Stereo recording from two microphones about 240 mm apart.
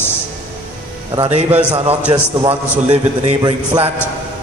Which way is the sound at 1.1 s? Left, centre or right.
Right.